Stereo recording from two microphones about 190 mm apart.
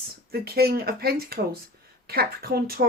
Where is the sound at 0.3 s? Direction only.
55° right (ahead or behind).